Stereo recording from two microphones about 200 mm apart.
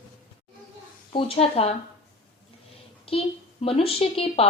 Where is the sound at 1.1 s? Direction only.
30° left (ahead or behind).